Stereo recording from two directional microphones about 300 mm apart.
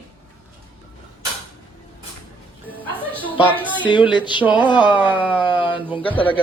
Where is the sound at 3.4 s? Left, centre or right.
Centre.